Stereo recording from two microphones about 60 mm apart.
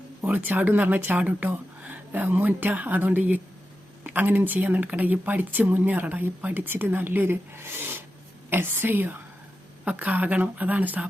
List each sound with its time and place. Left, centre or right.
0.3 s speech: right
9.8 s speech: right